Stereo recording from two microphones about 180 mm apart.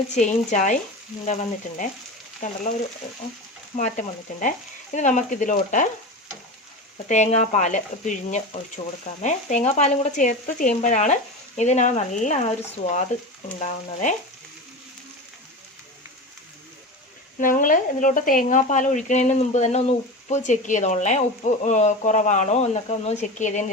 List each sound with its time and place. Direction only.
0.1 s speech: 40° left (ahead or behind)
3.8 s speech: 40° left (ahead or behind)
7.1 s speech: 40° left (ahead or behind)
17.4 s speech: 50° left (ahead or behind)